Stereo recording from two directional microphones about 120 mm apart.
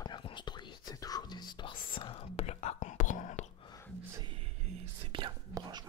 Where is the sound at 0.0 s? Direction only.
40° left (ahead or behind); by 3.4 s 90° left.